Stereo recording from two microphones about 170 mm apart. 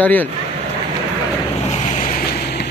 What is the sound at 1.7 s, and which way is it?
Boat, 50° left (ahead or behind).